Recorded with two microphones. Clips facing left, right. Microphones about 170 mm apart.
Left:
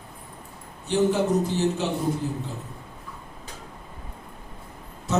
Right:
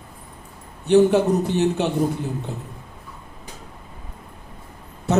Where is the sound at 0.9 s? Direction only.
65° right (ahead or behind).